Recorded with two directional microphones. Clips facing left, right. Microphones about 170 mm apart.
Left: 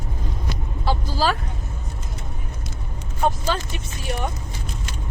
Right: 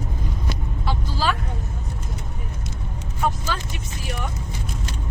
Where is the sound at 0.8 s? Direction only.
35° left (ahead or behind).